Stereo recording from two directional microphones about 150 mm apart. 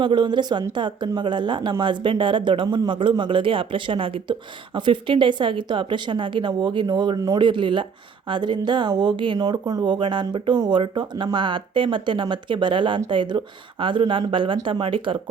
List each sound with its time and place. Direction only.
0.0 s speech: 30° right (ahead or behind)